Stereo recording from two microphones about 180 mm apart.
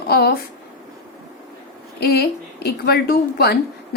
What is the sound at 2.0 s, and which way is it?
A woman's voice, 60° left (ahead or behind).